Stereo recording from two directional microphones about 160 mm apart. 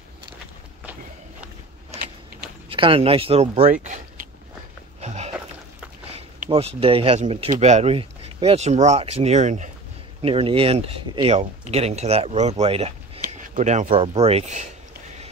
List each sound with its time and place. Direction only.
2.7 s speech: 35° right (ahead or behind); by 4.0 s 50° right (ahead or behind)
5.0 s a sound: 45° right (ahead or behind)
6.8 s speech: 35° right (ahead or behind)
7.5 s speech: 45° right (ahead or behind)
10.2 s speech: 35° right (ahead or behind)
13.2 s speech: 50° right (ahead or behind)